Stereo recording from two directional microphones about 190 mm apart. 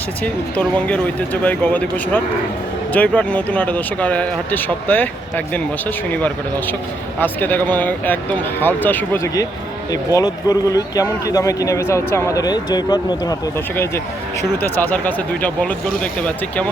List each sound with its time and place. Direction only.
0.5 s speech: 5° left (ahead or behind)
6.1 s speech: 10° left (ahead or behind)
14.6 s speech: 10° left (ahead or behind)